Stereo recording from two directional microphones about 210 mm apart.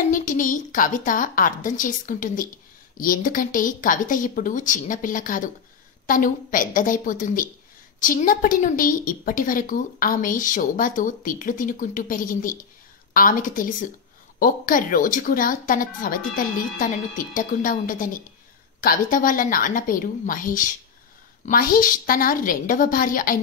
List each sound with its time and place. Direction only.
0.1 s a woman's voice: 40° left (ahead or behind)